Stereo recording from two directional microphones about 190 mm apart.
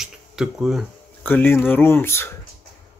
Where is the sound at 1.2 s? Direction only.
10° left (ahead or behind).